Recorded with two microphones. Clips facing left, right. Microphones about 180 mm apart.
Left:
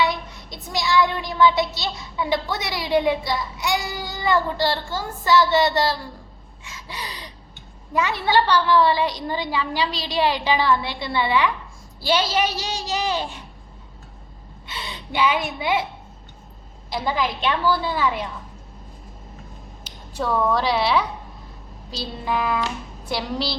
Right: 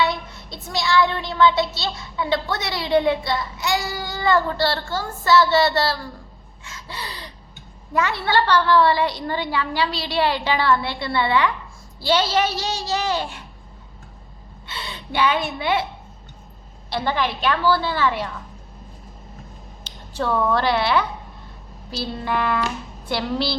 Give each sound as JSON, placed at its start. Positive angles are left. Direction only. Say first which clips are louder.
{"t": 0.0, "sound": "child singing", "louder": "even", "side_deg": 15}
{"t": 6.7, "sound": "a sound", "louder": "right 1 dB", "side_deg": 15}
{"t": 7.9, "sound": "child singing", "louder": "left 1 dB", "side_deg": 15}
{"t": 14.7, "sound": "a woman's voice", "louder": "right 1 dB", "side_deg": 15}
{"t": 15.5, "sound": "child singing", "louder": "right 1 dB", "side_deg": 10}
{"t": 16.9, "sound": "child singing", "louder": "right 1 dB", "side_deg": 10}
{"t": 20.1, "sound": "a woman's voice", "louder": "right 1 dB", "side_deg": 5}